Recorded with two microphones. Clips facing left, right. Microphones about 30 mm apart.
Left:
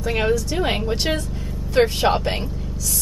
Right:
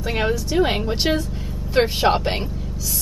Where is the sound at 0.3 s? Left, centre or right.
Centre.